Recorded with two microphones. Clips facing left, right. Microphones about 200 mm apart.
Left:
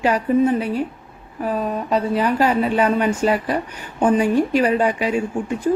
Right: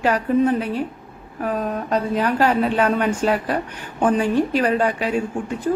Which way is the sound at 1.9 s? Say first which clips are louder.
Left 1 dB; 10° left (ahead or behind).